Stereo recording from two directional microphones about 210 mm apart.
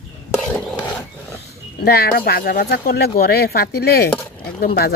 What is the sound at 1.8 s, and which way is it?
Speech, 45° left (ahead or behind).